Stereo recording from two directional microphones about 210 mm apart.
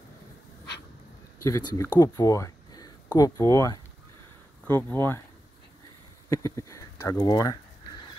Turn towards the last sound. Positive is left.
turn(degrees=20)  # may be behind; listen again after turning